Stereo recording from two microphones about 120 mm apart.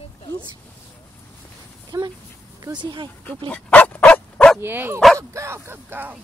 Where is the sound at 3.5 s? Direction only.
10° left (ahead or behind).